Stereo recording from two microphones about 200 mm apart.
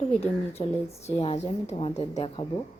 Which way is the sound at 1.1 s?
30° left (ahead or behind).